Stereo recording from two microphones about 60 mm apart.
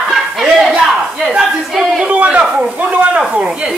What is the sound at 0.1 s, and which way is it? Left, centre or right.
Chuckle, centre.